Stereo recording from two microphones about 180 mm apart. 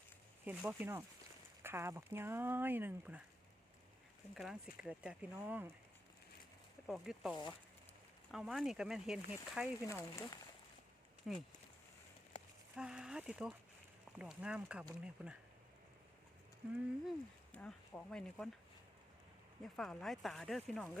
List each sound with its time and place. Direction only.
0.4 s speech: 10° right (ahead or behind)
4.4 s speech: 5° right (ahead or behind)
6.8 s speech: centre (ahead or behind)
9.8 s speech: 15° left (ahead or behind)
11.3 s speech: centre (ahead or behind)
12.7 s speech: 5° right (ahead or behind)
17.1 s speech: 5° left (ahead or behind)
19.6 s speech: centre (ahead or behind)